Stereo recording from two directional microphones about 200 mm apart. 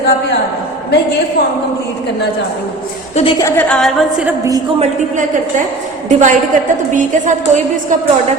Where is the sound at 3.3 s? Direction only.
10° left (ahead or behind).